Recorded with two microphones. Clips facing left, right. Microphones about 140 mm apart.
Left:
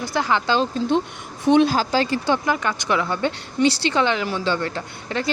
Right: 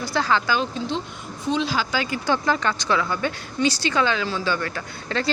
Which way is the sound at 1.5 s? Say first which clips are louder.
Left 9 dB; 60° left (ahead or behind).